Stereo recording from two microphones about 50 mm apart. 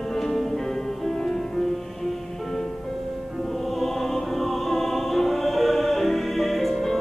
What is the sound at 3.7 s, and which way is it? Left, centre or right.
Choir, centre.